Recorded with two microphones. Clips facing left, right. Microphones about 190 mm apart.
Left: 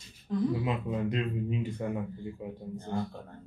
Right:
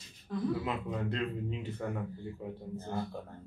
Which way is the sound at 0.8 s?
15° left (ahead or behind).